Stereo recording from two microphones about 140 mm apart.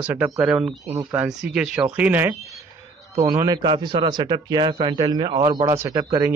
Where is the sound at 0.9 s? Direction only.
20° right (ahead or behind).